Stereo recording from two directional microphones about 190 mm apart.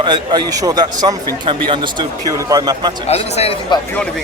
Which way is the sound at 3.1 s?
35° left (ahead or behind).